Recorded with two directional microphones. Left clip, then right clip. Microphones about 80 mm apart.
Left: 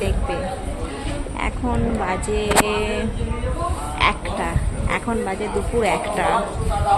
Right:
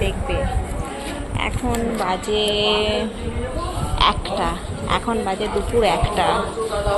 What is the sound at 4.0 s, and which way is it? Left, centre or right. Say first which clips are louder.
Speech: right 2 dB; centre.